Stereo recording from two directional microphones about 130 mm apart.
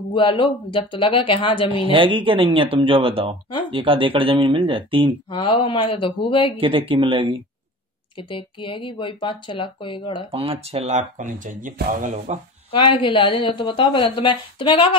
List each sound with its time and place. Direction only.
0.1 s a woman's voice: 40° left (ahead or behind)
1.9 s speech: 40° right (ahead or behind)
5.3 s a woman's voice: 40° left (ahead or behind)
6.6 s speech: 45° right (ahead or behind)
8.2 s a woman's voice: 40° left (ahead or behind)
10.3 s speech: 45° right (ahead or behind); by 12.4 s 85° right
12.7 s a woman's voice: 40° left (ahead or behind)